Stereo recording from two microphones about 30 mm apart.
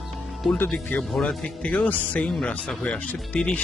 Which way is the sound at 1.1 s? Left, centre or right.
Left.